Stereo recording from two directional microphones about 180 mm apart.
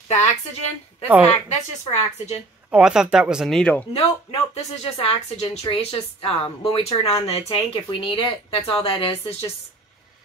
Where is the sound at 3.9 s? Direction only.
35° left (ahead or behind).